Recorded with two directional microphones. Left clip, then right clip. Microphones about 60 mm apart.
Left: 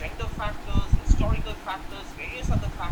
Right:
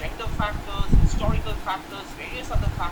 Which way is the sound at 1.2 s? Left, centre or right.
Left.